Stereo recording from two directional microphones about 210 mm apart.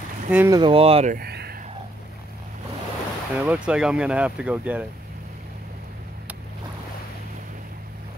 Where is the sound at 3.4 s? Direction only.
5° right (ahead or behind).